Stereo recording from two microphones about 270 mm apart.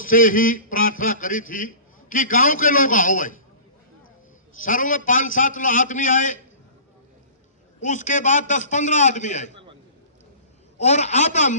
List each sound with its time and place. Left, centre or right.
0.0 s a man's voice: left
4.6 s a man's voice: left
7.8 s a man's voice: left
10.8 s a man's voice: left